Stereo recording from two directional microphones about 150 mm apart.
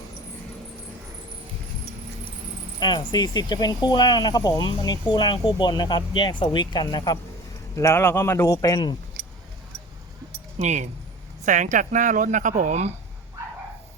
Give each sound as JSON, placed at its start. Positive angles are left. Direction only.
{"t": 2.8, "sound": "speech", "side_deg": 30}
{"t": 7.8, "sound": "a man's voice", "side_deg": 15}
{"t": 10.6, "sound": "speech", "side_deg": -50}